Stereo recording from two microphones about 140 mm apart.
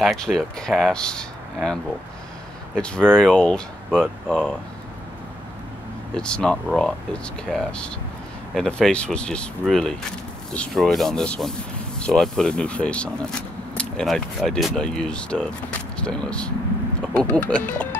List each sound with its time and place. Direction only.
0.0 s speech: centre (ahead or behind)
6.1 s speech: 5° left (ahead or behind)